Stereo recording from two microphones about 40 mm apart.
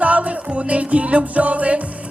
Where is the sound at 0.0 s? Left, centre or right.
Right.